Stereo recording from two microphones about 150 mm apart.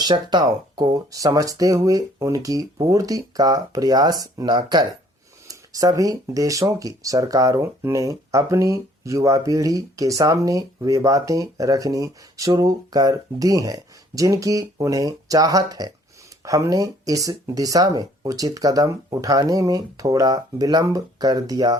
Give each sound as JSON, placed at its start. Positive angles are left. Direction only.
{"t": 0.0, "sound": "speech", "side_deg": -30}